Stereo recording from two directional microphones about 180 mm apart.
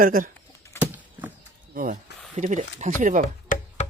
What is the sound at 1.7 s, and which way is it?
Speech, 50° right (ahead or behind).